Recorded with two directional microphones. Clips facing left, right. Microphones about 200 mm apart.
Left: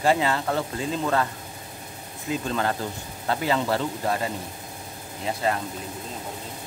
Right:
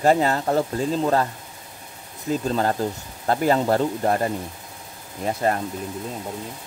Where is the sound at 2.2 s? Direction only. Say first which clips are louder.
Right 4 dB; 40° right (ahead or behind).